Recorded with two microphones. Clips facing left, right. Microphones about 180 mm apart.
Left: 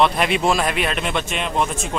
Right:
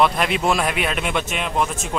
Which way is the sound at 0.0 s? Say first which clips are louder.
Left 1 dB; centre (ahead or behind).